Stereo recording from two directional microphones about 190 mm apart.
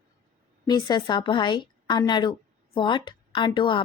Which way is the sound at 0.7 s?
20° left (ahead or behind).